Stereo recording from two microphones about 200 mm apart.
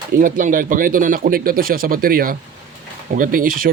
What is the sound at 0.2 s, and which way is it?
Speech, 40° right (ahead or behind).